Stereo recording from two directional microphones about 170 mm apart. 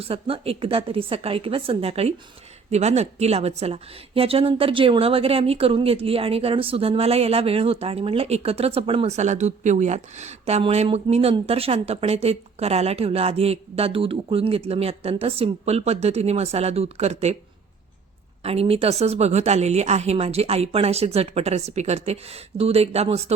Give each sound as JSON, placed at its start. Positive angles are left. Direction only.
{"t": 0.0, "sound": "a woman's voice", "side_deg": -35}
{"t": 18.4, "sound": "a woman's voice", "side_deg": -35}